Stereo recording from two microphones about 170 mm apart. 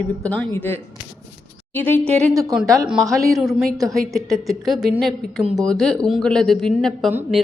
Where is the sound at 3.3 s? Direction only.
Centre (ahead or behind).